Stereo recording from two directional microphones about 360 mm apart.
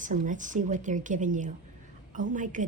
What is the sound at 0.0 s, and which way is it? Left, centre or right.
A woman's voice, right.